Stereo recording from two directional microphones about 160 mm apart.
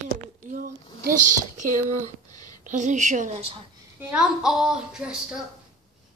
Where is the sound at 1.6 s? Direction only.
50° right (ahead or behind).